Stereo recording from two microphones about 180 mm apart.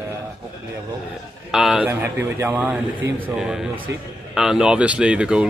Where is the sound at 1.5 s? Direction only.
5° right (ahead or behind).